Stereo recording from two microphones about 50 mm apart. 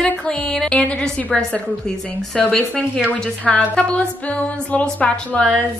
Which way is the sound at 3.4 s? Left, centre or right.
Left.